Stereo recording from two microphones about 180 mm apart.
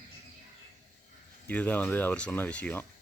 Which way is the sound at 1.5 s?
10° left (ahead or behind).